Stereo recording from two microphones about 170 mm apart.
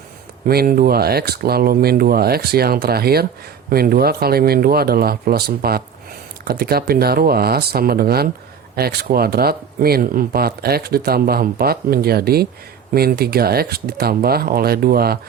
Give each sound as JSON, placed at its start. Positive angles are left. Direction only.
{"t": 0.4, "sound": "speech", "side_deg": -60}